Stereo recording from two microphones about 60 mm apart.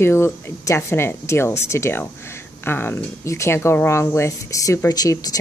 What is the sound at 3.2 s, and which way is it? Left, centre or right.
Speech, left.